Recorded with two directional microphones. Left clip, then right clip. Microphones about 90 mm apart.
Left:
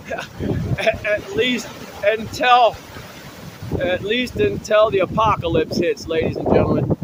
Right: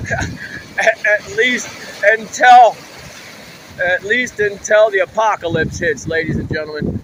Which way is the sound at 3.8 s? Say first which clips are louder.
Right 5 dB; 50° left (ahead or behind).